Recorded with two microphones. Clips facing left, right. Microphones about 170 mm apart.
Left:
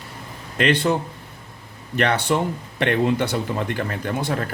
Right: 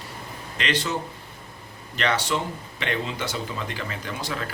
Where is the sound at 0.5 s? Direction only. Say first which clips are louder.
Left 8 dB; 55° left (ahead or behind).